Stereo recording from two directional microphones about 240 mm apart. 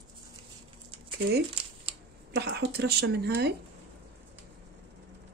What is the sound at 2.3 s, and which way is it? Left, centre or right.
Speech, right.